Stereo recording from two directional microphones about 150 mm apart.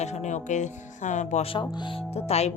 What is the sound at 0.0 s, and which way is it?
A woman's voice, 50° left (ahead or behind).